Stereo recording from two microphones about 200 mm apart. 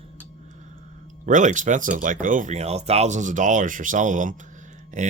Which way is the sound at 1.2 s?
40° right (ahead or behind).